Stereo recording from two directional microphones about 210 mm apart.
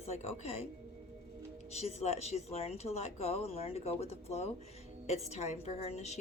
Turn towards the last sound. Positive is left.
turn(degrees=30)  # may be behind; listen again after turning